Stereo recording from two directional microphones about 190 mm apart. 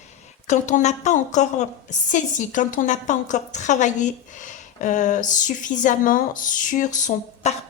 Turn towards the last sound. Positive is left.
turn(degrees=40)  # may be behind; listen again after turning